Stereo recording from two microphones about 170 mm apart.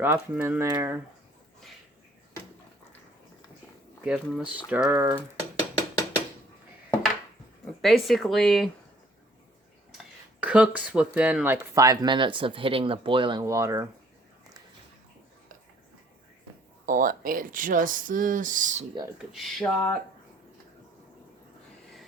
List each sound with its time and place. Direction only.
0.0 s speech: 10° right (ahead or behind)
4.0 s speech: 5° right (ahead or behind)
7.8 s speech: centre (ahead or behind)
10.4 s speech: 5° right (ahead or behind)
16.8 s speech: 50° right (ahead or behind)
19.3 s speech: centre (ahead or behind)